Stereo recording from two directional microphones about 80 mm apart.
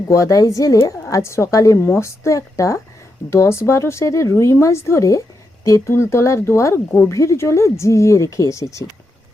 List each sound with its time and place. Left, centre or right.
0.1 s speech: left